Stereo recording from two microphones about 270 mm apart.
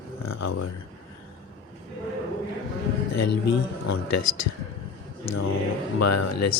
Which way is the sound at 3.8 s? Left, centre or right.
Left.